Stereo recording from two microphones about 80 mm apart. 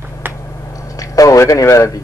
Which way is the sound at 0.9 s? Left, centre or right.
Left.